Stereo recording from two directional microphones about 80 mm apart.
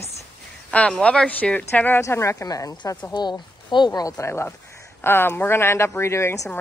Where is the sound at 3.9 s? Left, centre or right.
Left.